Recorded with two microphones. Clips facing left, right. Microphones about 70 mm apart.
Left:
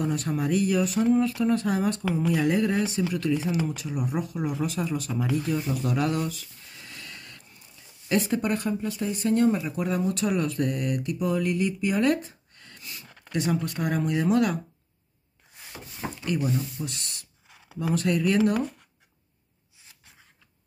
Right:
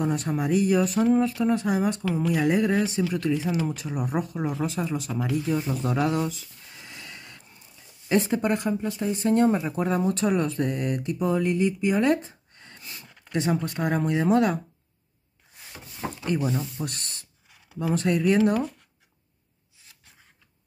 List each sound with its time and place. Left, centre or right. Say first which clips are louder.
0.0 s speech: right 1 dB; right
5.3 s a sound: right 2 dB; right
8.1 s speech: right 2 dB; right
16.8 s speech: right 2 dB; right
17.7 s speech: right 1 dB; right